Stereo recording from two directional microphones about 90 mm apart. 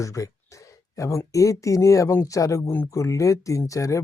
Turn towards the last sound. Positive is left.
turn(degrees=35)  # may be behind; listen again after turning